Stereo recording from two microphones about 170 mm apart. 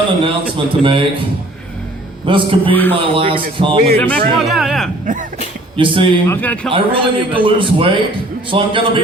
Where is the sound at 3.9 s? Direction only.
10° left (ahead or behind).